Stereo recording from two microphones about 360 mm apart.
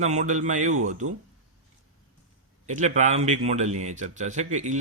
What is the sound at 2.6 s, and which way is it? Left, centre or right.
A man's voice, centre.